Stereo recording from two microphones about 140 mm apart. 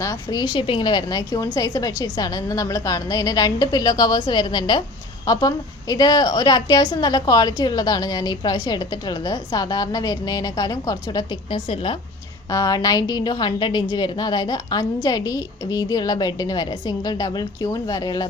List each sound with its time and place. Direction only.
0.0 s a woman's voice: 25° left (ahead or behind)
11.7 s a woman's voice: 40° left (ahead or behind)
12.5 s a woman's voice: 25° left (ahead or behind)